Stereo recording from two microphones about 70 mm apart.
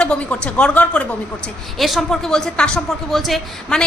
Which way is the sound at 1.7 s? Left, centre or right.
Centre.